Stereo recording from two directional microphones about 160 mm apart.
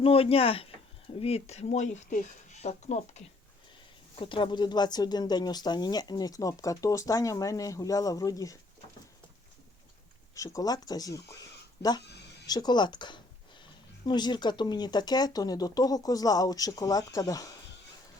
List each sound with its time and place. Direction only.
0.0 s speech: 35° left (ahead or behind)
4.2 s speech: 30° left (ahead or behind)
10.3 s speech: 20° left (ahead or behind)